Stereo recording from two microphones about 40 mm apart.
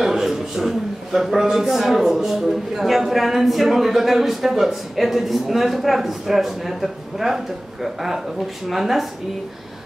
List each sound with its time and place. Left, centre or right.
0.0 s a man's voice: centre